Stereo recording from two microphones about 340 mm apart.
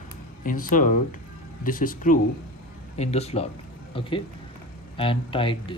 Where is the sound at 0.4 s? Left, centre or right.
Left.